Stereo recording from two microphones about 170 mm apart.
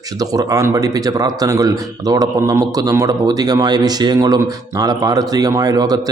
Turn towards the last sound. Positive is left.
turn(degrees=-20)  # may be behind; listen again after turning